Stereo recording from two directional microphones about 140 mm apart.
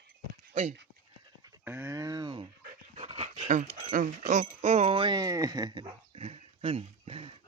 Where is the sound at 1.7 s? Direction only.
15° right (ahead or behind).